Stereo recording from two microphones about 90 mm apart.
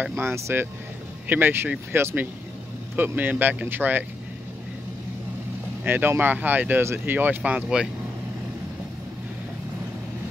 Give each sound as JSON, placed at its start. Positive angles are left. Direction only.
{"t": 0.0, "sound": "speech", "side_deg": -20}
{"t": 5.9, "sound": "speech", "side_deg": -25}